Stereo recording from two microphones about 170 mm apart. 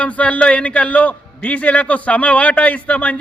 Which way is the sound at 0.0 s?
10° left (ahead or behind).